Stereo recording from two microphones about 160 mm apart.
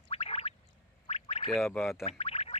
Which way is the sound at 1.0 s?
40° left (ahead or behind).